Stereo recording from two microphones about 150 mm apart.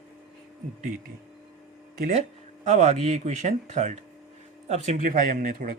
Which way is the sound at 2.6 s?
50° right (ahead or behind).